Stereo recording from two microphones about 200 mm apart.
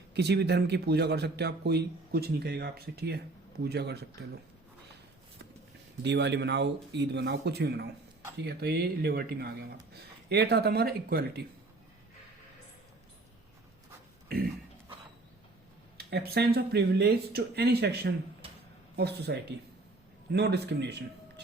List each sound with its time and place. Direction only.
0.1 s a man's voice: 55° right (ahead or behind)
6.0 s a man's voice: 60° right (ahead or behind)
16.0 s speech: 55° right (ahead or behind)
18.4 s a sound: 25° right (ahead or behind)
18.9 s a man's voice: 55° right (ahead or behind)